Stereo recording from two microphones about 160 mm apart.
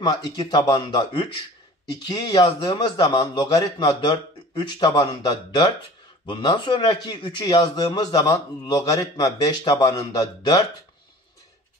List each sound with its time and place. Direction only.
0.1 s a man's voice: 25° left (ahead or behind)